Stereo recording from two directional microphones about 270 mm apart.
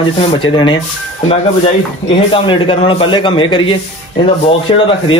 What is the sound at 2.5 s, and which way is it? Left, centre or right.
A man's voice, centre.